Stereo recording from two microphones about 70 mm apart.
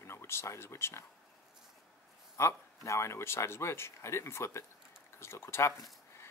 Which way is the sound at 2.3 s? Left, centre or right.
Left.